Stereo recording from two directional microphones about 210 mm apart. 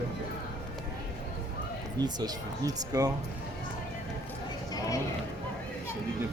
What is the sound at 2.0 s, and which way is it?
Speech, 20° right (ahead or behind).